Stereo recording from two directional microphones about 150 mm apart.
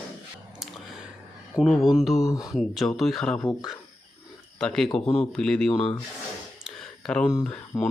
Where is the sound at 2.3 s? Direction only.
20° left (ahead or behind).